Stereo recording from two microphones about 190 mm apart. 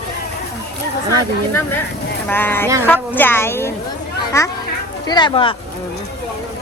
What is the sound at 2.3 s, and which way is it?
Speech, 10° left (ahead or behind).